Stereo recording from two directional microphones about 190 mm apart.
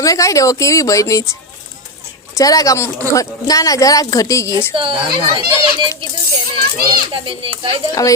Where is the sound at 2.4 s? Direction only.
20° left (ahead or behind).